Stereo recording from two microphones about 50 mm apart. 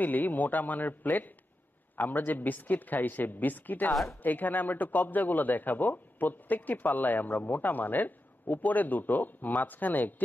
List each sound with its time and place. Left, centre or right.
0.0 s speech: left